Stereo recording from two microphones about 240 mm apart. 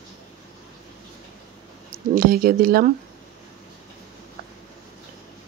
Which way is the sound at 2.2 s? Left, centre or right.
Right.